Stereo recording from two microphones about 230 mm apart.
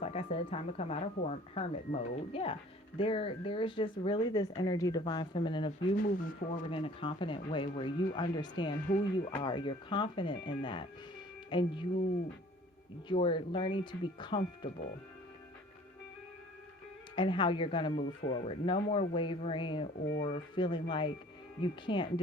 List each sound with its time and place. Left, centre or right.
0.0 s speech: left
6.0 s speech: left
6.7 s speech: left
13.1 s speech: left
17.2 s speech: left